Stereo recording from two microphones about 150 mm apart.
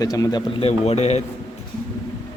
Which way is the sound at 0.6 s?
45° left (ahead or behind).